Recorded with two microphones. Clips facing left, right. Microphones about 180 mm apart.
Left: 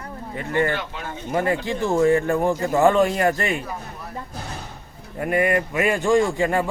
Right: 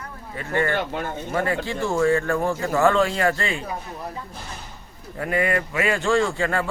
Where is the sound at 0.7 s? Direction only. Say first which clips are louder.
Right 5 dB; 50° right (ahead or behind).